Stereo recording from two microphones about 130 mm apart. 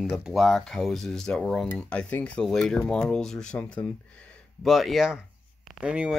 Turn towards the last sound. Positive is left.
turn(degrees=-10)  # may be behind; listen again after turning